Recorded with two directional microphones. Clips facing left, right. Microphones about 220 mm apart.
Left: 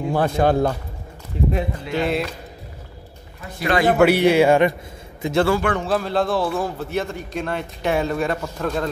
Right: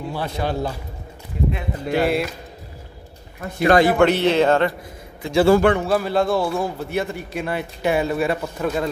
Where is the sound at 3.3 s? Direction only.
50° right (ahead or behind).